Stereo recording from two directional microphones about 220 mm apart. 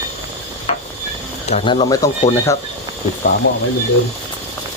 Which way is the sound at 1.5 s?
25° left (ahead or behind).